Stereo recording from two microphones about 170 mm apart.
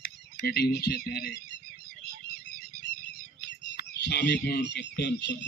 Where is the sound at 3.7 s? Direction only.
70° left (ahead or behind); by 5.3 s 85° left.